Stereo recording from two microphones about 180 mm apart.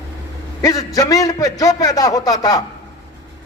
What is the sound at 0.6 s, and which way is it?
A man's voice, 20° left (ahead or behind).